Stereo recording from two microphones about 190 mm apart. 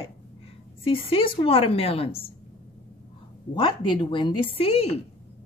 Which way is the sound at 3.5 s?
25° left (ahead or behind).